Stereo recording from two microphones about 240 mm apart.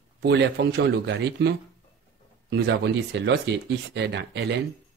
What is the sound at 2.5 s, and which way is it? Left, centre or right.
Speech, right.